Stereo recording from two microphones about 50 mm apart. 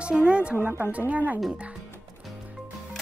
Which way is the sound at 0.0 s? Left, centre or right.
Right.